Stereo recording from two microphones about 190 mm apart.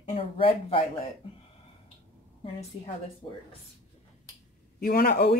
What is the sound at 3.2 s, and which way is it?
Speech, 30° left (ahead or behind).